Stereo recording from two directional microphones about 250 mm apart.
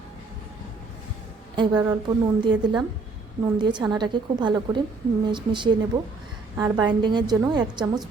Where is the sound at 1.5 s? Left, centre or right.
Centre.